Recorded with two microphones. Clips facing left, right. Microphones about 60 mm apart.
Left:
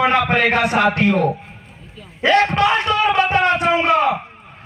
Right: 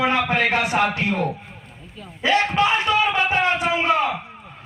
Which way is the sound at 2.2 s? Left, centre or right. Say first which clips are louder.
Left 4 dB; left.